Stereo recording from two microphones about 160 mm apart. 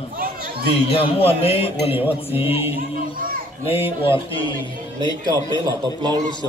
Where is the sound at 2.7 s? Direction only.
65° right (ahead or behind).